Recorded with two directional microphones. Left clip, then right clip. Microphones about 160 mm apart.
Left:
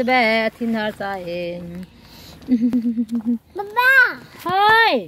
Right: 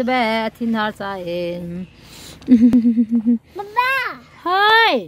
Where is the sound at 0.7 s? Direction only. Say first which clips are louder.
Right 1 dB; 25° right (ahead or behind).